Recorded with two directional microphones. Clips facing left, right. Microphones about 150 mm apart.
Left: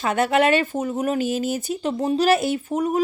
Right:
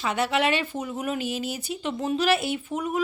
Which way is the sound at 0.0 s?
50° left (ahead or behind).